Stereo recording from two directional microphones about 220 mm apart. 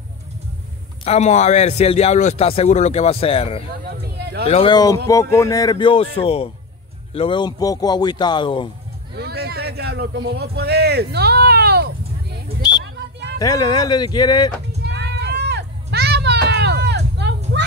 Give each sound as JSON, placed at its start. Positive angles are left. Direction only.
{"t": 1.0, "sound": "a man's voice", "side_deg": 30}
{"t": 3.8, "sound": "speech", "side_deg": -45}
{"t": 4.5, "sound": "a man's voice", "side_deg": 25}
{"t": 9.1, "sound": "speech", "side_deg": -45}
{"t": 13.4, "sound": "a man's voice", "side_deg": 15}
{"t": 14.8, "sound": "a sound", "side_deg": -50}